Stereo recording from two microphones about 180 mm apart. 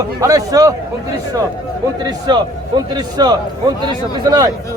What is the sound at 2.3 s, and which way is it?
A man's voice, 25° right (ahead or behind).